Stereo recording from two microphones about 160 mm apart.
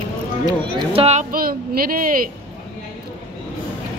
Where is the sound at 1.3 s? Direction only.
65° right (ahead or behind).